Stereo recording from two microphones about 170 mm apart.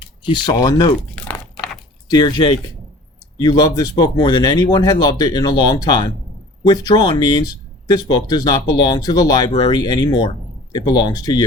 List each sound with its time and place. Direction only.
0.3 s speech: 25° left (ahead or behind)
2.0 s speech: 25° left (ahead or behind)